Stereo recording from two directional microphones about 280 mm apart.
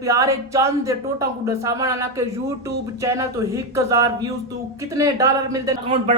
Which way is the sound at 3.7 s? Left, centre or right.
Centre.